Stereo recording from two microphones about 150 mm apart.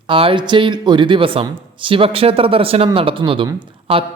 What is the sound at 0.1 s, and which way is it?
Speech, 35° right (ahead or behind).